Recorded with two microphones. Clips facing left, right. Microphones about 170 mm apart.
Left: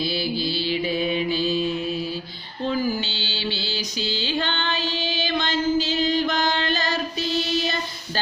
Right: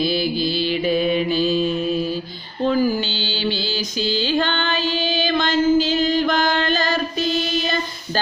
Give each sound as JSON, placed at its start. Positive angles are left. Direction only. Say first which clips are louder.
{"t": 0.7, "sound": "mantra", "louder": "right 5 dB", "side_deg": -55}
{"t": 2.6, "sound": "mantra", "louder": "right 6 dB", "side_deg": -50}